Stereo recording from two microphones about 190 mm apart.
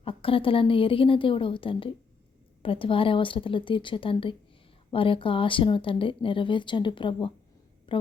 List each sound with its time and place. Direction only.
0.0 s a woman's voice: 30° left (ahead or behind)